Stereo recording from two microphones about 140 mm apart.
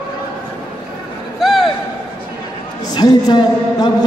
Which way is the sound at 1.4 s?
Centre (ahead or behind).